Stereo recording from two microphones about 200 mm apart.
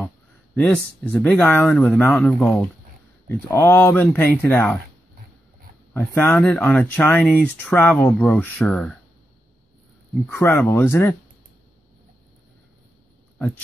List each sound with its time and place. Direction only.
0.6 s speech: 5° left (ahead or behind)
5.9 s speech: 10° left (ahead or behind)
10.2 s speech: 10° left (ahead or behind)